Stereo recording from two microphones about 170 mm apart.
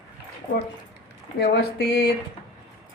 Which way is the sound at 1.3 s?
80° left.